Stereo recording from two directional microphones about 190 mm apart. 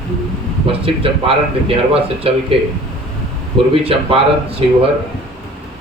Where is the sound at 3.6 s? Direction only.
30° right (ahead or behind).